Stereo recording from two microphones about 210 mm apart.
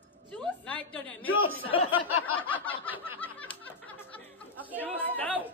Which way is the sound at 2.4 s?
10° left (ahead or behind).